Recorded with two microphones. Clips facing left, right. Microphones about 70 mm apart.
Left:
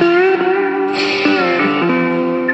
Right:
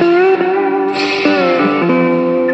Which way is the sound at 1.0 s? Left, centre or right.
Right.